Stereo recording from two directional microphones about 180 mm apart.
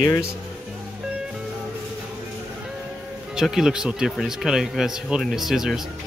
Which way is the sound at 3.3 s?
5° right (ahead or behind).